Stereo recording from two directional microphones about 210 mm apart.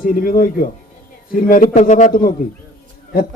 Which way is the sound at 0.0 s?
40° left (ahead or behind).